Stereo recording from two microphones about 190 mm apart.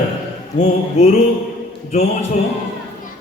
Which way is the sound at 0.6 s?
30° left (ahead or behind).